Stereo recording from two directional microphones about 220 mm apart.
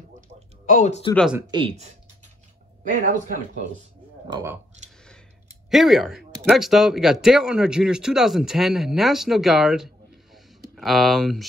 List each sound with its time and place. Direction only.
0.7 s speech: 30° left (ahead or behind)
1.1 s speech: centre (ahead or behind)
1.5 s speech: 25° right (ahead or behind)
4.3 s speech: 10° right (ahead or behind)
5.7 s speech: centre (ahead or behind)